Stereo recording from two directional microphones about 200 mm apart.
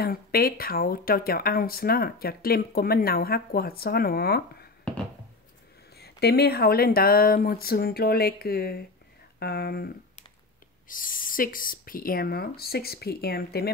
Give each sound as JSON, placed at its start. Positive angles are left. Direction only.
{"t": 0.0, "sound": "speech", "side_deg": 50}
{"t": 4.9, "sound": "a sound", "side_deg": 5}
{"t": 5.9, "sound": "speech", "side_deg": 55}
{"t": 10.9, "sound": "speech", "side_deg": 45}